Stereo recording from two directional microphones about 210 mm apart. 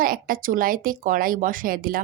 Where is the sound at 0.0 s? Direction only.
40° right (ahead or behind).